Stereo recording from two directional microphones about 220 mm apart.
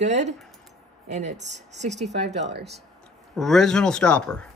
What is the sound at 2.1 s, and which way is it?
Speech, 50° right (ahead or behind).